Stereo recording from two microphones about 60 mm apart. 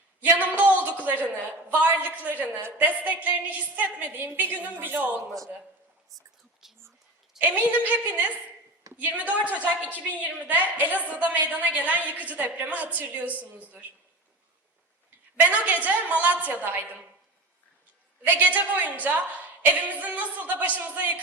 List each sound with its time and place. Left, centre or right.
0.2 s a man's voice: right
2.6 s a woman's voice: right
2.9 s a woman's voice: right
6.1 s whispering: centre
7.3 s a woman's voice: right
15.4 s a woman's voice: right
18.3 s a woman's voice: right